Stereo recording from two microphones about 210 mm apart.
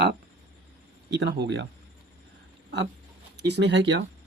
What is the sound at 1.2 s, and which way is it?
Speech, 55° right (ahead or behind).